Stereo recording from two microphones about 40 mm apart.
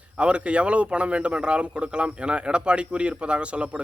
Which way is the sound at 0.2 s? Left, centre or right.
Right.